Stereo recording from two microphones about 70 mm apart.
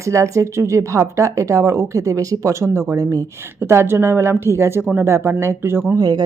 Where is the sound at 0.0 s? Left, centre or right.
Right.